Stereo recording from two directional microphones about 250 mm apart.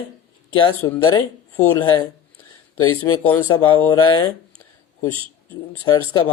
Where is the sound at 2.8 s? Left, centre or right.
Left.